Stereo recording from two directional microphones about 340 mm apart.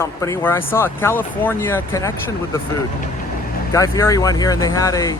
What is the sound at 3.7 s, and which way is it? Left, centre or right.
Speech, centre.